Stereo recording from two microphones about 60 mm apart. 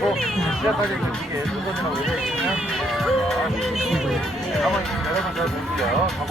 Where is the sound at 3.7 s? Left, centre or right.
Centre.